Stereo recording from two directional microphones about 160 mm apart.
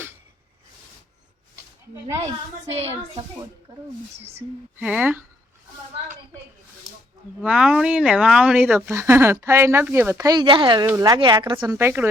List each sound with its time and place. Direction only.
4.8 s speech: 10° right (ahead or behind)
7.4 s a woman's voice: 5° right (ahead or behind); by 11.7 s 30° right (ahead or behind)
11.7 s speech: 15° right (ahead or behind)